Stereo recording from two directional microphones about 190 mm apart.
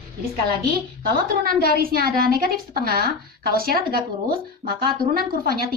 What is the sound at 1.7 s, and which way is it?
A woman's voice, 50° right (ahead or behind).